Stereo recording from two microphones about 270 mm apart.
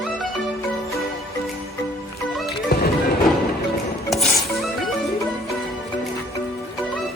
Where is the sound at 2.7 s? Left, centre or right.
Left.